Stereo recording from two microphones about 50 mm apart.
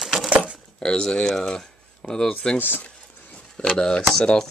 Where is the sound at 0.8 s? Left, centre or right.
Centre.